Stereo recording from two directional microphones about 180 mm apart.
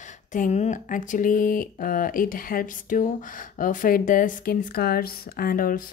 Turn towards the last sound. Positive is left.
turn(degrees=50)  # may be behind; listen again after turning